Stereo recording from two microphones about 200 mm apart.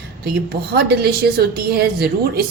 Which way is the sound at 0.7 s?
50° right (ahead or behind).